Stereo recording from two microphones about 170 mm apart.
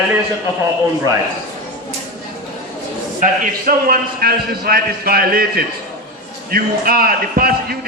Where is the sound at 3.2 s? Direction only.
55° right (ahead or behind).